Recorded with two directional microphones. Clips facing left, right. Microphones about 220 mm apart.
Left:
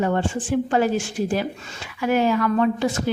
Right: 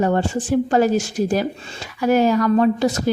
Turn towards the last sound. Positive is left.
turn(degrees=-40)  # may be behind; listen again after turning